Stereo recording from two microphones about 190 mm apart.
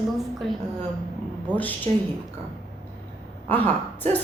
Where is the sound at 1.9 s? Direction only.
35° right (ahead or behind).